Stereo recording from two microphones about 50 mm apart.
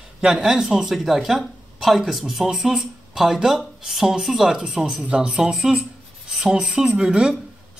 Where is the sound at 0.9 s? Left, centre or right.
Centre.